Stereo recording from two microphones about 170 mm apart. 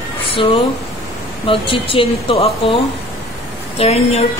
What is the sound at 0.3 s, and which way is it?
Speech, 35° left (ahead or behind).